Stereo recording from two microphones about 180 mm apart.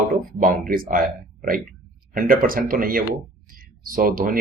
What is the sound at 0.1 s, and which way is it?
Speech, 50° right (ahead or behind).